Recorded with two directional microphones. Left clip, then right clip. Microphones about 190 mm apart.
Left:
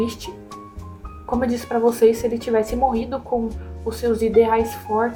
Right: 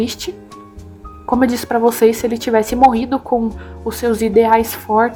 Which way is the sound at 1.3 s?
25° right (ahead or behind).